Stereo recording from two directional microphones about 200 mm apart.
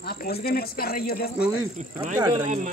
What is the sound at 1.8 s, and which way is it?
Speech, 35° right (ahead or behind).